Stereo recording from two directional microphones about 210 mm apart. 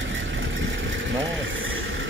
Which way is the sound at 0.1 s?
65° right (ahead or behind).